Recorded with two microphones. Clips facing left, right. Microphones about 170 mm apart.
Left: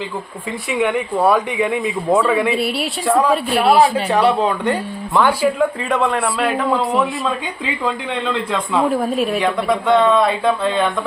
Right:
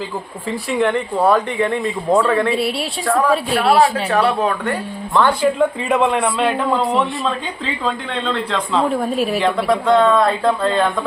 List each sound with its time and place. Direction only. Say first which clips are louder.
0.7 s speech: even; 5° left (ahead or behind)
3.1 s speech: left 1 dB; 15° left (ahead or behind)
3.3 s speech: left 1 dB; centre (ahead or behind)
4.2 s speech: left 2 dB; 20° left (ahead or behind)
5.5 s speech: right 1 dB; centre (ahead or behind)
8.5 s speech: left 1 dB; 5° left (ahead or behind)